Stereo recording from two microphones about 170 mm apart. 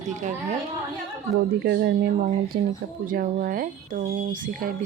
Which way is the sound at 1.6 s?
75° right (ahead or behind).